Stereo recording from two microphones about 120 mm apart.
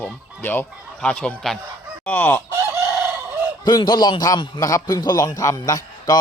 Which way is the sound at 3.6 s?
35° left (ahead or behind).